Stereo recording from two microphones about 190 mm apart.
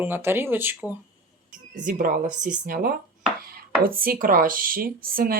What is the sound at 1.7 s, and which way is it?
Speech, 45° right (ahead or behind).